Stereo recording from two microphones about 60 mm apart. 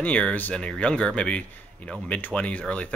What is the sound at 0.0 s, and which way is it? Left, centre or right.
Speech, left.